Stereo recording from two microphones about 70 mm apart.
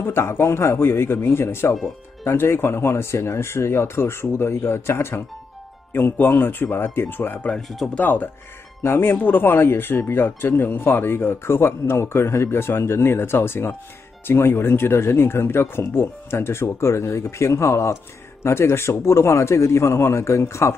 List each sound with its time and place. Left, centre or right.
0.0 s speech: left
7.5 s speech: centre
7.9 s speech: left